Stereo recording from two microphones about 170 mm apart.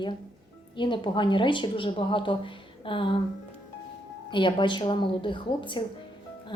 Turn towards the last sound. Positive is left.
turn(degrees=30)  # may be behind; listen again after turning